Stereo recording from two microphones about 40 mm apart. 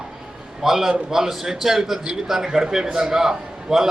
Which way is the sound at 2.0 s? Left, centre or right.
Right.